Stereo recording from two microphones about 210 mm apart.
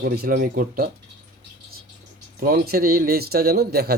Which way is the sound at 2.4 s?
45° right (ahead or behind).